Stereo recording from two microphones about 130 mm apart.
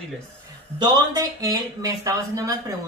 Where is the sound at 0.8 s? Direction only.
30° right (ahead or behind).